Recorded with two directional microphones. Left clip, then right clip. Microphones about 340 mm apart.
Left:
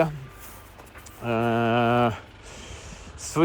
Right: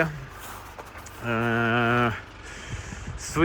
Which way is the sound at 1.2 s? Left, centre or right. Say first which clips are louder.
Left 1 dB; centre.